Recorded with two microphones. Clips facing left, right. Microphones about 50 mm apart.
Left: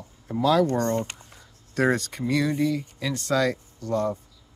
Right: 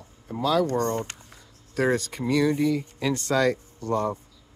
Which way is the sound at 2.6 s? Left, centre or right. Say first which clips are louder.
Right 2 dB; centre.